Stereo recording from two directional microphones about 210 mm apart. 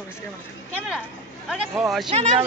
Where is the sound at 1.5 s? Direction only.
Centre (ahead or behind).